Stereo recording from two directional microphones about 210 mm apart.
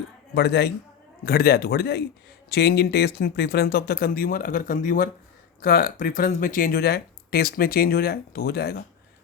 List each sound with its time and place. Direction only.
0.3 s speech: 50° left (ahead or behind)